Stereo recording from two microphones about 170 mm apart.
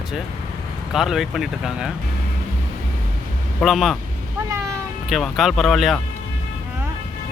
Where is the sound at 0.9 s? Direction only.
Centre (ahead or behind).